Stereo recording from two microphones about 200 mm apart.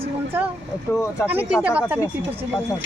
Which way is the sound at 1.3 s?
5° right (ahead or behind).